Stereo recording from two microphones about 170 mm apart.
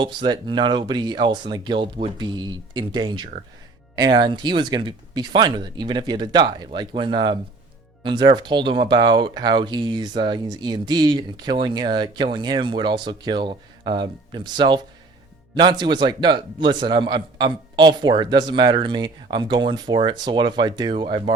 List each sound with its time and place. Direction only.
0.0 s speech: 25° right (ahead or behind)